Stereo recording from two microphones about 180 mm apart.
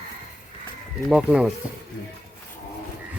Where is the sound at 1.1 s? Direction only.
5° right (ahead or behind).